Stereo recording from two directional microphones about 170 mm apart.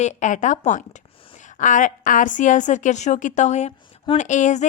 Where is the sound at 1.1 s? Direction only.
35° left (ahead or behind).